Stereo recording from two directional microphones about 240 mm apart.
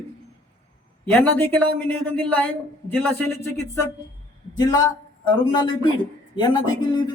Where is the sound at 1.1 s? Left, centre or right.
Centre.